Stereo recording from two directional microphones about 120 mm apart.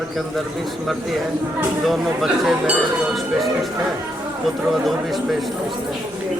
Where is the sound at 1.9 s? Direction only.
5° right (ahead or behind).